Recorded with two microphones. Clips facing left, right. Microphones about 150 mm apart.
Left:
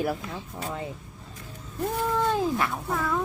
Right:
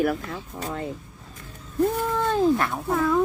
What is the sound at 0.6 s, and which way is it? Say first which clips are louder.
Speech: right 2 dB; 5° left (ahead or behind).